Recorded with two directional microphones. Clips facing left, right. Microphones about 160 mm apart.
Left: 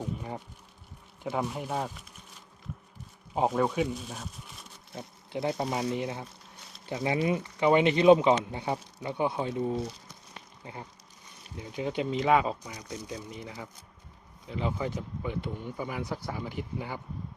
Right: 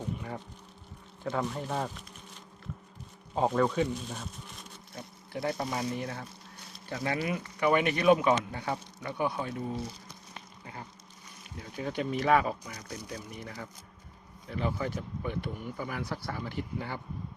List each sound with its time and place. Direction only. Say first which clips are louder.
1.2 s speech: left 1 dB; 10° left (ahead or behind)
3.5 s speech: even; 10° left (ahead or behind)
4.9 s speech: left 3 dB; 25° left (ahead or behind)
10.6 s insect: left 2 dB; 25° left (ahead or behind)
11.5 s speech: left 3 dB; 20° left (ahead or behind)